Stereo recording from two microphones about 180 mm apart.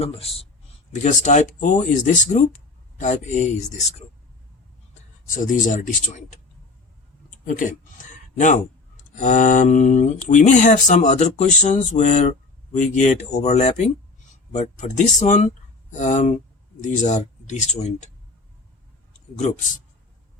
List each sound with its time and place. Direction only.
0.0 s speech: 35° left (ahead or behind)
5.3 s speech: 45° left (ahead or behind)
7.4 s speech: 45° left (ahead or behind)